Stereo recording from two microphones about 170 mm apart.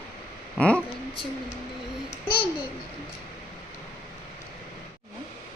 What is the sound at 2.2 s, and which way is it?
Speech, 30° left (ahead or behind).